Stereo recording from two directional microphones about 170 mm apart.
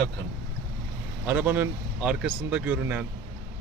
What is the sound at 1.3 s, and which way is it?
Speech, 10° right (ahead or behind).